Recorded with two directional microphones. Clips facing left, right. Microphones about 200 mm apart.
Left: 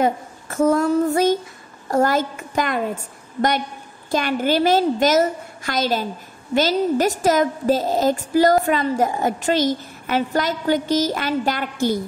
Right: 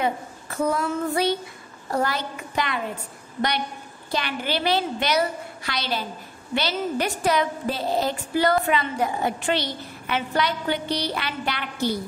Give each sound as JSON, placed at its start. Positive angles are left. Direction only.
{"t": 0.0, "sound": "a woman's voice", "side_deg": 45}
{"t": 4.1, "sound": "a woman's voice", "side_deg": 45}